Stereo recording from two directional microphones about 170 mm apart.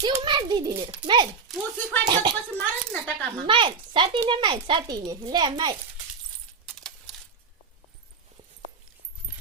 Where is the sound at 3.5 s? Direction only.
30° right (ahead or behind).